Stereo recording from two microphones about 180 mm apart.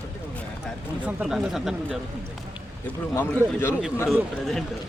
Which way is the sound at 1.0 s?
5° right (ahead or behind).